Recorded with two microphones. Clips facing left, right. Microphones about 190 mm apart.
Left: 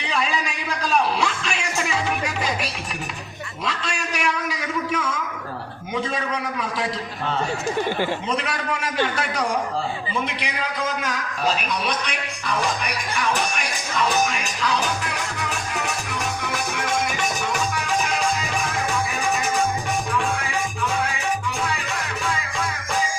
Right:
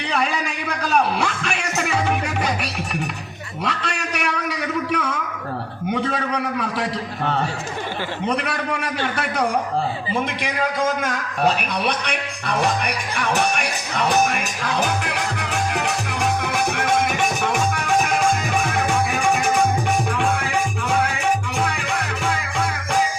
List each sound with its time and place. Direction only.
0.0 s music: 60° right (ahead or behind)
3.6 s a sound: 60° right (ahead or behind)
8.3 s a man's voice: 60° right (ahead or behind)
20.1 s music: 65° right (ahead or behind)